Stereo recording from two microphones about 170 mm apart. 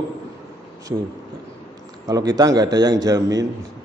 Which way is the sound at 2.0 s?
20° right (ahead or behind).